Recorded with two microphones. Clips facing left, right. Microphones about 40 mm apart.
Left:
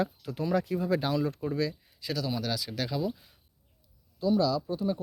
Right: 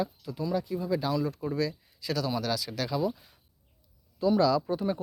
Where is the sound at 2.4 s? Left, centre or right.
Centre.